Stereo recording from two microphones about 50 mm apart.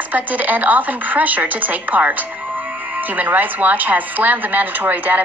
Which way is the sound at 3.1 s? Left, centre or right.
Right.